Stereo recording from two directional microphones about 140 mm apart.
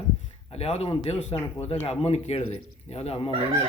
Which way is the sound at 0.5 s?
45° left (ahead or behind).